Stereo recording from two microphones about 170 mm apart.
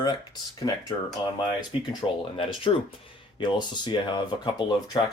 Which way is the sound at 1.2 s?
25° left (ahead or behind).